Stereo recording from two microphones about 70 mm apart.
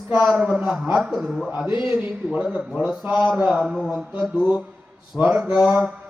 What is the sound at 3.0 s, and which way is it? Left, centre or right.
Speech, right.